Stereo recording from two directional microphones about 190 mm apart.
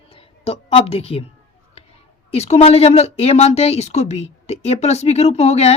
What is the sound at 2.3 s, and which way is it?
Speech, 35° left (ahead or behind).